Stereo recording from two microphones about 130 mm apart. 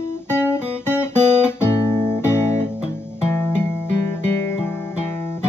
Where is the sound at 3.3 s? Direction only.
20° left (ahead or behind).